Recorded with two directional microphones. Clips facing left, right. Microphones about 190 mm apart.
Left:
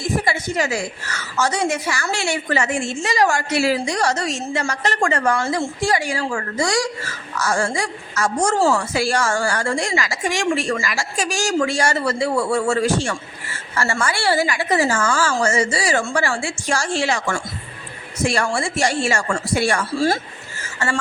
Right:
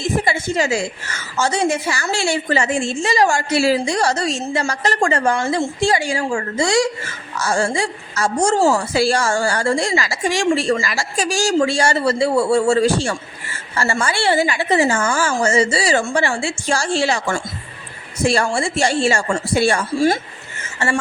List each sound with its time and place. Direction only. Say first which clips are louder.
0.0 s a woman's voice: right 2 dB; 25° right (ahead or behind)